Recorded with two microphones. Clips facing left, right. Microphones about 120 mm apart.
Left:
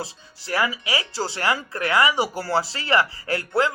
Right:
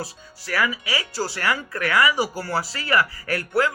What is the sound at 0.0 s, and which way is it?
Speech, 25° left (ahead or behind).